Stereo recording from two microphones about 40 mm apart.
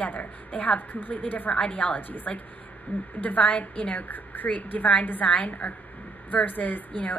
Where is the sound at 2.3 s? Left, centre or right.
Centre.